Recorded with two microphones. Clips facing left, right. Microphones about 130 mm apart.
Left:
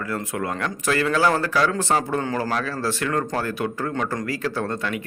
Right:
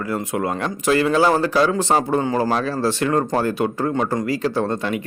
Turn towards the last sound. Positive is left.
turn(degrees=-25)  # may be behind; listen again after turning